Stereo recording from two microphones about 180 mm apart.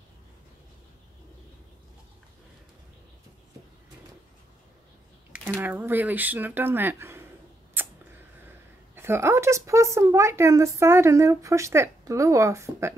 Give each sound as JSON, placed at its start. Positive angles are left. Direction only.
{"t": 5.3, "sound": "speech", "side_deg": -10}
{"t": 7.8, "sound": "a sound", "side_deg": -10}
{"t": 8.9, "sound": "speech", "side_deg": -15}